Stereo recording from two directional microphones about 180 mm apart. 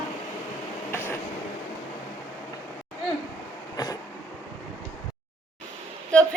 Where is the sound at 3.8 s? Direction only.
20° left (ahead or behind).